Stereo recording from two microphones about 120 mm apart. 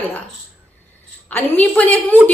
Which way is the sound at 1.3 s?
15° left (ahead or behind).